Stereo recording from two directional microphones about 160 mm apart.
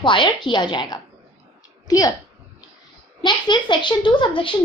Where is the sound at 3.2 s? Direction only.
30° left (ahead or behind).